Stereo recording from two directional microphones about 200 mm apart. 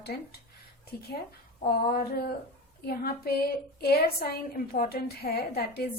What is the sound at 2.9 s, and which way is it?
A woman's voice, 50° left (ahead or behind).